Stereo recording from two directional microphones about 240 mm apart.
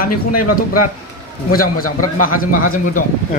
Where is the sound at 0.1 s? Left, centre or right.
Left.